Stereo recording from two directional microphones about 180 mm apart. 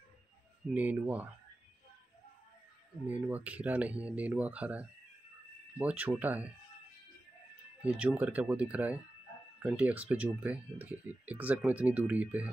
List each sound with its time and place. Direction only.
0.7 s speech: 10° right (ahead or behind)
3.1 s speech: 10° right (ahead or behind)
7.8 s speech: 10° right (ahead or behind)